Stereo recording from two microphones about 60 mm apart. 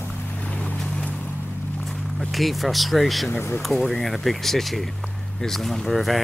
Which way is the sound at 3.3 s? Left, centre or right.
Left.